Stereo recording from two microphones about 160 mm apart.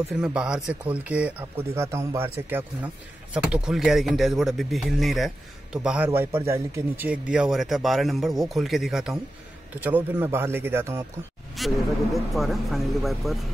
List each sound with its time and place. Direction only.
0.2 s speech: 5° right (ahead or behind)
6.0 s speech: 15° right (ahead or behind)
11.5 s speech: centre (ahead or behind)